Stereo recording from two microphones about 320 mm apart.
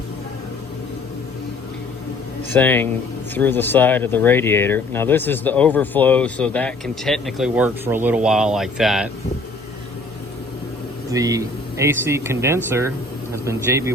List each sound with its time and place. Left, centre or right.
2.5 s speech: centre
11.1 s speech: centre